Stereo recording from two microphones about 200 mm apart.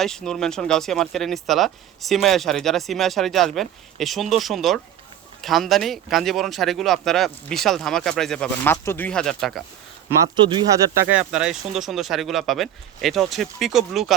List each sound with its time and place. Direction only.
0.0 s speech: 5° left (ahead or behind)
10.3 s speech: 25° right (ahead or behind)
11.1 s speech: 5° right (ahead or behind)